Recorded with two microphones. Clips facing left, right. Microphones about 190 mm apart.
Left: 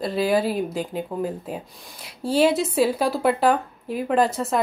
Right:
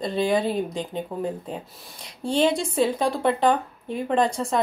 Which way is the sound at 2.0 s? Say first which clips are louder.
Left 2 dB; 5° left (ahead or behind).